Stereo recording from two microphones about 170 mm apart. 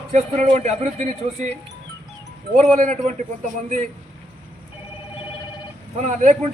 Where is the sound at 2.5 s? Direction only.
50° right (ahead or behind).